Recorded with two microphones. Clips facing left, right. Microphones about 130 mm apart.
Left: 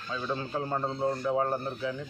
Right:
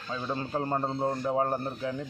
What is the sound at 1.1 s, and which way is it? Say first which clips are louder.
Speech: even; 25° right (ahead or behind).